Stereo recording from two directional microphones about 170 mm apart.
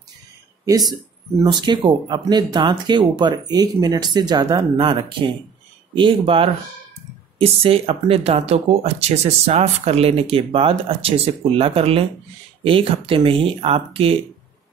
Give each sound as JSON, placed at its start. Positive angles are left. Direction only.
{"t": 1.4, "sound": "speech", "side_deg": -25}